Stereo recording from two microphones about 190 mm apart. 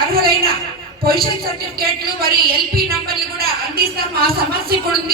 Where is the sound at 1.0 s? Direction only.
50° right (ahead or behind).